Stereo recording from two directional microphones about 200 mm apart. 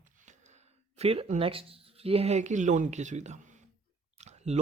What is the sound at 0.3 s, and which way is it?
Speech, 35° right (ahead or behind).